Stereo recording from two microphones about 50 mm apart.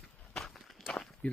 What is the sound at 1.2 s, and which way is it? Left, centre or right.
Walk, left.